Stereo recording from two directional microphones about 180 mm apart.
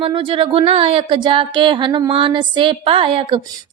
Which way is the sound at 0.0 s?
30° right (ahead or behind).